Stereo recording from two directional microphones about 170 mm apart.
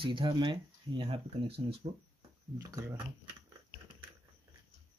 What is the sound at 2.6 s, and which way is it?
Speech, 20° right (ahead or behind).